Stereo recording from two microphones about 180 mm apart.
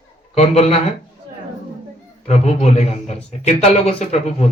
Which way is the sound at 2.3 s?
35° left (ahead or behind).